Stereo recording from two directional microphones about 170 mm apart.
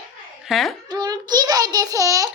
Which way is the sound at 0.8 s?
25° right (ahead or behind).